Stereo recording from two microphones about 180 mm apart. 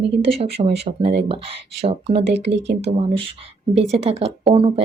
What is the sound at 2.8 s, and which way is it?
Speech, 30° right (ahead or behind).